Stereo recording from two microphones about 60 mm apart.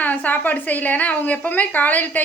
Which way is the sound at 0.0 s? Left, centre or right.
Left.